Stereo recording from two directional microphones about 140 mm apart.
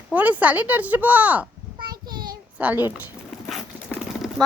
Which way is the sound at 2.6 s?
10° right (ahead or behind).